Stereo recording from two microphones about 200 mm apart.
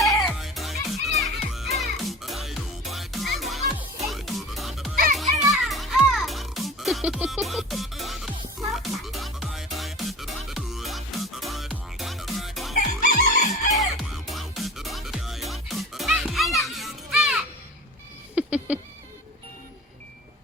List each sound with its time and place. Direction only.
0.0 s music: centre (ahead or behind)
13.0 s chicken: 40° left (ahead or behind)
13.7 s music: centre (ahead or behind)
18.3 s a sound: 5° right (ahead or behind)